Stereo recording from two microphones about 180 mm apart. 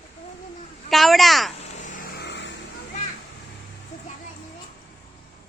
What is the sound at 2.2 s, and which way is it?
Vehicle, 75° left (ahead or behind).